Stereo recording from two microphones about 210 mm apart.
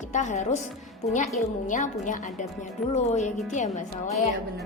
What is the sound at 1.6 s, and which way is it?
A woman's voice, 35° left (ahead or behind).